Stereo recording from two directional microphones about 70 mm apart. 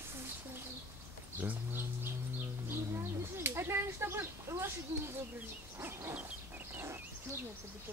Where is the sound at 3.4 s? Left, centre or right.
Right.